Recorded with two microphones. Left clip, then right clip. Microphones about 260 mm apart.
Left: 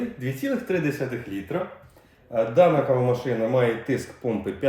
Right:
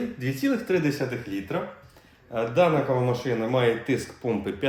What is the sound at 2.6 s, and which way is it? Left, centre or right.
Speech, centre.